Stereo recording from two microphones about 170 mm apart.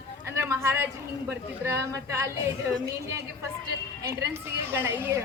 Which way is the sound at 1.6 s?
15° right (ahead or behind).